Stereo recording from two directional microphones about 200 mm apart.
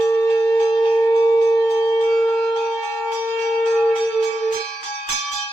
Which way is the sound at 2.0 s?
5° left (ahead or behind).